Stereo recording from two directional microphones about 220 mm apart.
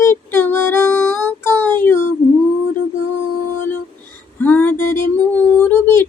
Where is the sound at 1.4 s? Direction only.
10° left (ahead or behind).